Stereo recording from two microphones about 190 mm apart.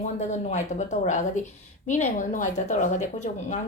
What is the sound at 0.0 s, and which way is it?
Speech, 40° left (ahead or behind).